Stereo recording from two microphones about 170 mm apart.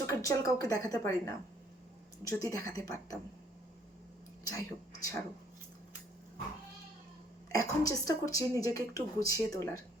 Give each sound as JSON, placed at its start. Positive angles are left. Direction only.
{"t": 0.0, "sound": "speech", "side_deg": 20}
{"t": 4.4, "sound": "speech", "side_deg": 20}
{"t": 7.5, "sound": "speech", "side_deg": 20}